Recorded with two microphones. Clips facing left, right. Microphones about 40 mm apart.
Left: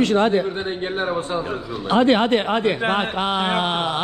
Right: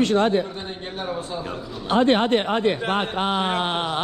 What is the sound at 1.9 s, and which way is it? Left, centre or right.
Speech, left.